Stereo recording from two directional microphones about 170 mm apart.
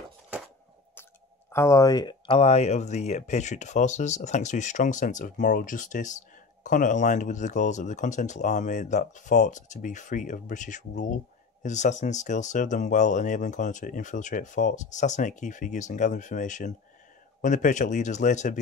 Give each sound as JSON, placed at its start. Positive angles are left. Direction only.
{"t": 1.5, "sound": "speech", "side_deg": 15}